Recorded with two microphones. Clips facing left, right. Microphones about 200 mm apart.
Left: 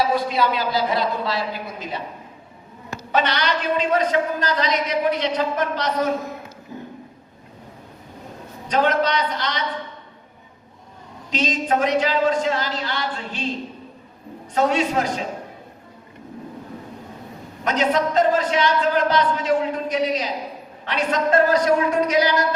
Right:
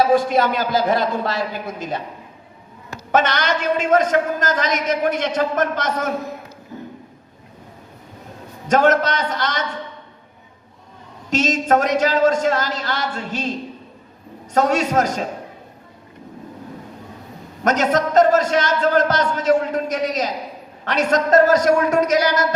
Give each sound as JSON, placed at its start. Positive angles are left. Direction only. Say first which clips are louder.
{"t": 0.1, "sound": "a man's voice", "louder": "right 4 dB", "side_deg": -50}
{"t": 3.1, "sound": "a man's voice", "louder": "right 3 dB", "side_deg": -45}
{"t": 8.6, "sound": "a man's voice", "louder": "right 4 dB", "side_deg": -45}
{"t": 11.3, "sound": "a man's voice", "louder": "right 4 dB", "side_deg": -45}
{"t": 14.5, "sound": "a man's voice", "louder": "right 2 dB", "side_deg": -40}
{"t": 17.6, "sound": "a man's voice", "louder": "right 2 dB", "side_deg": -45}